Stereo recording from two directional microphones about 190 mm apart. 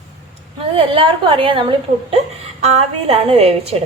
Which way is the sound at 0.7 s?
30° right (ahead or behind).